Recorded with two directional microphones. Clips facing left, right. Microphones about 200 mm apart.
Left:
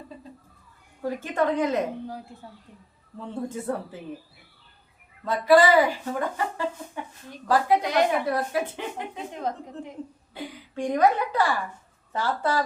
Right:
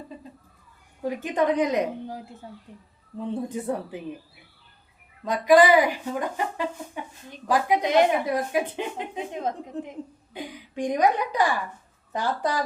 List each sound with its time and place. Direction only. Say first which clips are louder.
1.0 s speech: right 1 dB; 15° right (ahead or behind)
5.2 s speech: right 1 dB; 15° right (ahead or behind)